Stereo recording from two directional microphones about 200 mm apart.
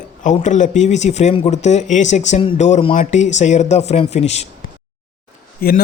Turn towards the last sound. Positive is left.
turn(degrees=50)  # may be behind; listen again after turning